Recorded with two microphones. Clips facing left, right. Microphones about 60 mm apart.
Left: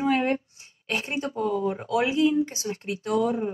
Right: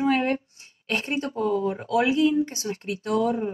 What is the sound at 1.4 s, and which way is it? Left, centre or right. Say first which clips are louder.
Speech: right 2 dB; left.